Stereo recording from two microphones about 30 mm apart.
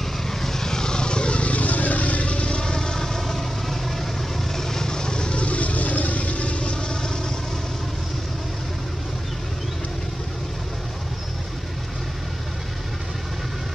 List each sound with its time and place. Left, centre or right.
0.3 s vehicle: centre; by 1.4 s left
1.4 s vehicle: left
2.2 s vehicle: left
5.4 s vehicle: left